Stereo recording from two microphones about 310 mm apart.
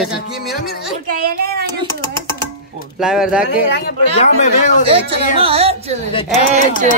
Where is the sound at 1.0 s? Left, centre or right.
Right.